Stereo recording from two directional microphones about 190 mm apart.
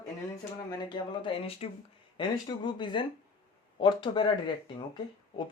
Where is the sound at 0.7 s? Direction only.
25° left (ahead or behind).